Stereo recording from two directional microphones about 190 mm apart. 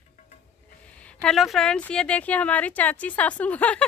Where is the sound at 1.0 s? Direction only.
5° left (ahead or behind).